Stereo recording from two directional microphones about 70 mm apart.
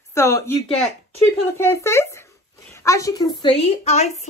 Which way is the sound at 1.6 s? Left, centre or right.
Left.